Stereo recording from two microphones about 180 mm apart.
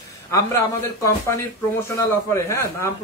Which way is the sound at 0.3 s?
15° left (ahead or behind).